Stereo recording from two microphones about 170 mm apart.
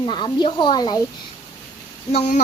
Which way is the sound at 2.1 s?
40° left (ahead or behind).